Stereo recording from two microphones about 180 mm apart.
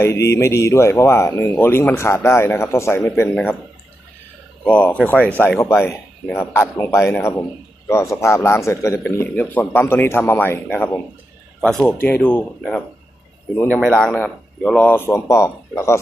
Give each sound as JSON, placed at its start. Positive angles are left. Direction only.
{"t": 0.0, "sound": "speech", "side_deg": 15}
{"t": 4.6, "sound": "speech", "side_deg": 5}